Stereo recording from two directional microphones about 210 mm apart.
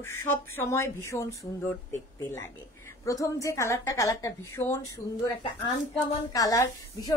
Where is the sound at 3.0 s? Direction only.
15° left (ahead or behind).